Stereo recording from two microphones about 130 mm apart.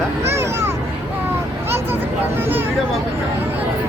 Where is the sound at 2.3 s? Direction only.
15° right (ahead or behind).